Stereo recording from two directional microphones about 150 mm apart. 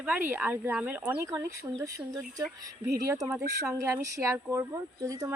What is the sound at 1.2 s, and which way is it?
Speech, 20° right (ahead or behind).